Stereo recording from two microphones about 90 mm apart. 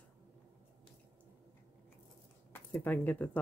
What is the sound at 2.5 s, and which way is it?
Speech, 25° left (ahead or behind).